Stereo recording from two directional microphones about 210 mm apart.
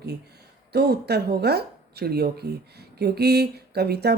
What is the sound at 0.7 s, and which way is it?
Speech, 50° right (ahead or behind).